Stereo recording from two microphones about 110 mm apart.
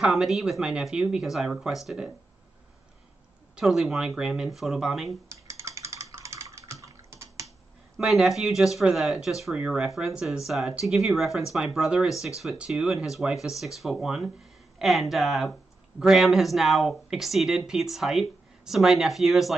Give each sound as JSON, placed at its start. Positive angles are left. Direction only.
{"t": 0.0, "sound": "speech", "side_deg": -5}
{"t": 3.5, "sound": "speech", "side_deg": -5}
{"t": 5.3, "sound": "typing", "side_deg": -25}
{"t": 8.0, "sound": "speech", "side_deg": 0}